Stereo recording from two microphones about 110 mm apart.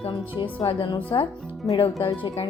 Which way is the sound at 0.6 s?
45° left (ahead or behind).